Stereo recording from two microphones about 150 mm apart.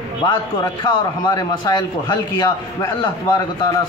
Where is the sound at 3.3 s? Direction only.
30° left (ahead or behind).